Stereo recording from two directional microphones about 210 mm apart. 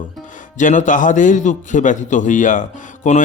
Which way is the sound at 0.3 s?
35° left (ahead or behind).